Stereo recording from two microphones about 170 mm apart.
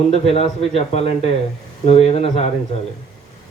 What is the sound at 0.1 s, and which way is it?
A man's voice, 40° left (ahead or behind).